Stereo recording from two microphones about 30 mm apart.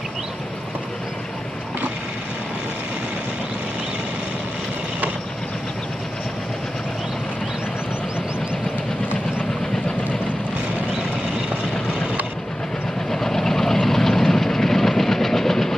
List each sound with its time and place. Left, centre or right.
13.1 s vehicle: centre